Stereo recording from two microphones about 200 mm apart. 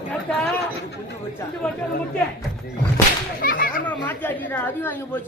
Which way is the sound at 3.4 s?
45° left (ahead or behind).